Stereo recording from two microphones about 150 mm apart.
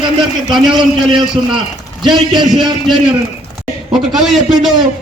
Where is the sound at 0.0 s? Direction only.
30° right (ahead or behind).